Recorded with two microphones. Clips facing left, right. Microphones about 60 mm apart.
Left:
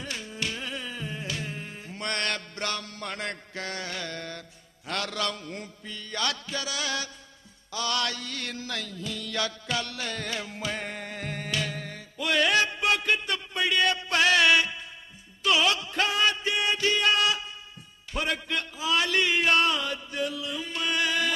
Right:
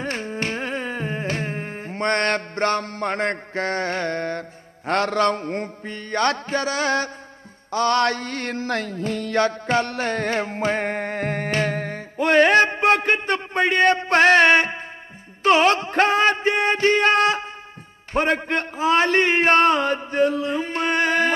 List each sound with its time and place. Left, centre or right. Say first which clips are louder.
0.0 s music: right 8 dB; right
7.7 s mantra: right 11 dB; right